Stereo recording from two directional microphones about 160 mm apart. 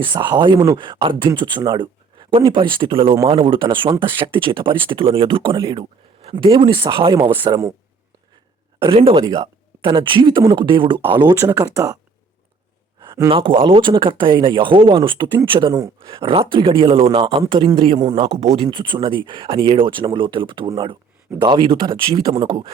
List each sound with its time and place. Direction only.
0.0 s speech: 30° right (ahead or behind)
4.4 s speech: 30° right (ahead or behind)
7.2 s speech: 20° right (ahead or behind)
8.8 s speech: 35° right (ahead or behind)
13.0 s a sound: 20° right (ahead or behind)
13.3 s speech: 35° right (ahead or behind)
18.3 s speech: 40° right (ahead or behind)